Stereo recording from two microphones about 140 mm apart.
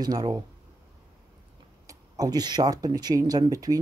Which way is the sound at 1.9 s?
25° right (ahead or behind).